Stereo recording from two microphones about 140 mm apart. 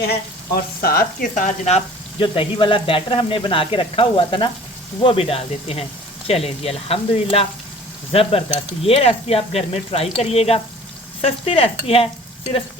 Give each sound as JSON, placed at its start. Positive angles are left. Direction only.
{"t": 0.5, "sound": "frying", "side_deg": 90}
{"t": 2.2, "sound": "frying", "side_deg": 40}
{"t": 5.0, "sound": "speech", "side_deg": 45}